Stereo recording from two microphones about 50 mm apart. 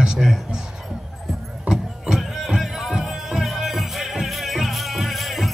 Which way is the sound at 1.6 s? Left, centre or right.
Centre.